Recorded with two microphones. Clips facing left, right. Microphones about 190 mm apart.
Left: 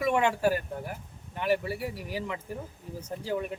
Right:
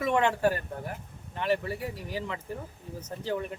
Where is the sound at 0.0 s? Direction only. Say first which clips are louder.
Even; 10° left (ahead or behind).